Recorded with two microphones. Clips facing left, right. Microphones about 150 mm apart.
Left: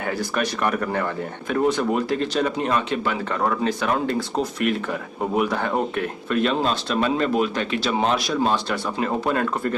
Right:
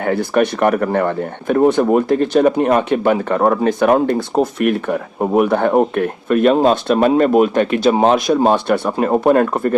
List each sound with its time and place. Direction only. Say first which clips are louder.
0.0 s speech: right 9 dB; 55° right (ahead or behind)